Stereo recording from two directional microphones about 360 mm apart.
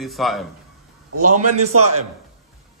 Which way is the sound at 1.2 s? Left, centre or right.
Right.